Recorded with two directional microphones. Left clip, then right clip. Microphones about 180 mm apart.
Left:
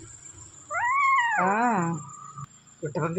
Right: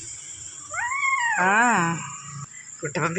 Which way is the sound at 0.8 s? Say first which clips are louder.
Left 2 dB; 25° left (ahead or behind).